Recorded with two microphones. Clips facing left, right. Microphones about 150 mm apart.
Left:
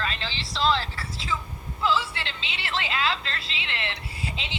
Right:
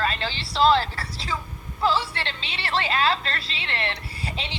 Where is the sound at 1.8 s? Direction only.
35° right (ahead or behind).